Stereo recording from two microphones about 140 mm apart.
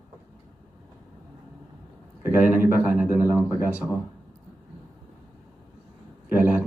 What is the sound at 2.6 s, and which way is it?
A man's voice, 10° right (ahead or behind).